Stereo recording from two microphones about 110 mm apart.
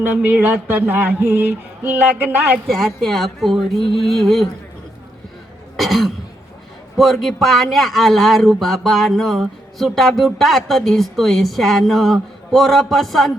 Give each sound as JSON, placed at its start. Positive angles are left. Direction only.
{"t": 0.0, "sound": "a sound", "side_deg": -20}
{"t": 2.6, "sound": "speech", "side_deg": 0}
{"t": 5.7, "sound": "cough", "side_deg": 0}
{"t": 6.9, "sound": "speech", "side_deg": 0}